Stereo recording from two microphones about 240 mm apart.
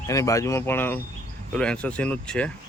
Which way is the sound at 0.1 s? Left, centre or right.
Centre.